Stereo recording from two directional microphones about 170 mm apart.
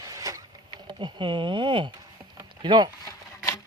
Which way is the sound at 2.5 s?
25° right (ahead or behind).